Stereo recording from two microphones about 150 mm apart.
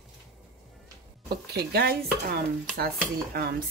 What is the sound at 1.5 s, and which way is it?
Stir, 90° right.